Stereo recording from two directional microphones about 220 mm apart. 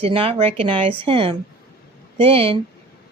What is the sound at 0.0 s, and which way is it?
A woman's voice, 25° right (ahead or behind).